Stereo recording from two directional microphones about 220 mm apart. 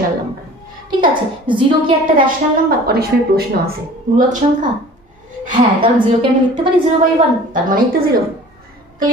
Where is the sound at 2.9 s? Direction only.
45° right (ahead or behind).